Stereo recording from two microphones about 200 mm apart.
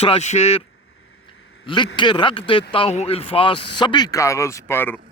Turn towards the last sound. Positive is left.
turn(degrees=10)  # may be behind; listen again after turning